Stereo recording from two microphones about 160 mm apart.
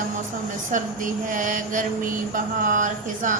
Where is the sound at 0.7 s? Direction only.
55° right (ahead or behind).